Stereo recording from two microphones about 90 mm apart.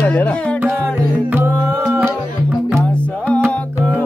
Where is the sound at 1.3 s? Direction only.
25° right (ahead or behind).